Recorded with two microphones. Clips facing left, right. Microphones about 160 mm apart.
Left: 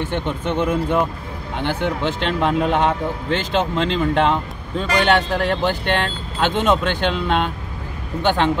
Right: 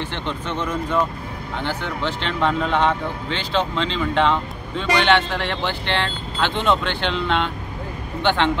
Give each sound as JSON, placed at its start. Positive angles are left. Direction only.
{"t": 0.0, "sound": "speech", "side_deg": 50}
{"t": 2.7, "sound": "a man's voice", "side_deg": 10}
{"t": 3.3, "sound": "speech", "side_deg": 50}